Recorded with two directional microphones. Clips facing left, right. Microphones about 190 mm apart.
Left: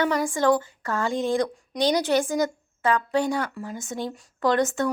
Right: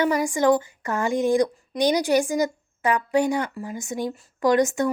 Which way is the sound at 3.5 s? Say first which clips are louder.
Right 2 dB; 5° right (ahead or behind).